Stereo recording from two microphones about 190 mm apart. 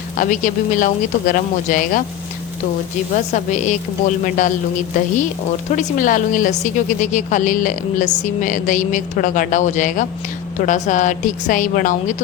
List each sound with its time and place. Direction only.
0.2 s speech: 45° left (ahead or behind)
3.3 s a woman's voice: 40° left (ahead or behind)
5.7 s a woman's voice: 45° left (ahead or behind)